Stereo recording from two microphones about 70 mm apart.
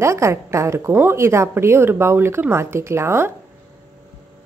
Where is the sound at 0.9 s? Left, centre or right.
Right.